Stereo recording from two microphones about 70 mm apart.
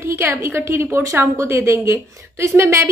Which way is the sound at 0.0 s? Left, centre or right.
Right.